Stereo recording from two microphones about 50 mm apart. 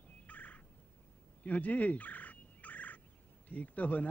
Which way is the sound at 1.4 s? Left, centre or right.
Left.